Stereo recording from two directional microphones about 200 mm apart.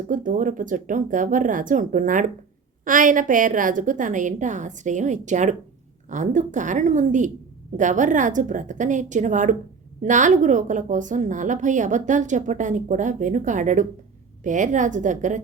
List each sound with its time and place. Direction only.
0.1 s a woman's voice: 40° right (ahead or behind)